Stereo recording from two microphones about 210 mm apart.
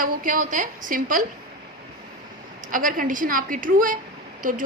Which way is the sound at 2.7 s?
40° right (ahead or behind).